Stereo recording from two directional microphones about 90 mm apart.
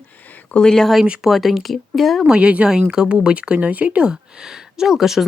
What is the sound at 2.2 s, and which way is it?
Speech, 10° right (ahead or behind).